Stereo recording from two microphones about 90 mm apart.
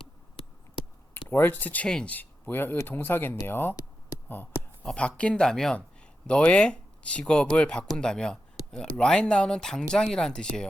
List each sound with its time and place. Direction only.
1.1 s speech: 20° left (ahead or behind)
2.1 s speech: 20° left (ahead or behind)
4.9 s speech: 15° left (ahead or behind)